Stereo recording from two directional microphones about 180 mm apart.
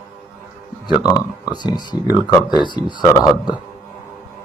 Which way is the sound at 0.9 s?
25° left (ahead or behind).